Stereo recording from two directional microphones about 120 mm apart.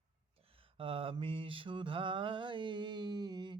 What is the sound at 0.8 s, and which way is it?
Mantra, 50° right (ahead or behind).